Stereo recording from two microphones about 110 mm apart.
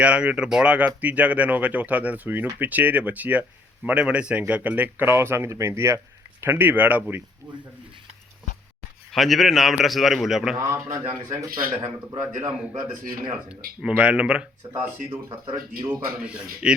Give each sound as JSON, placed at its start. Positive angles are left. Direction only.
{"t": 0.0, "sound": "speech", "side_deg": -10}
{"t": 9.1, "sound": "a man's voice", "side_deg": 0}
{"t": 10.7, "sound": "speech", "side_deg": -30}
{"t": 13.5, "sound": "speech", "side_deg": -10}
{"t": 15.3, "sound": "speech", "side_deg": -45}
{"t": 16.2, "sound": "speech", "side_deg": -10}